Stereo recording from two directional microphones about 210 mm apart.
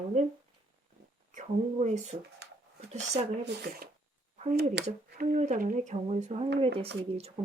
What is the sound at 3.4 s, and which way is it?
Speech, 45° right (ahead or behind).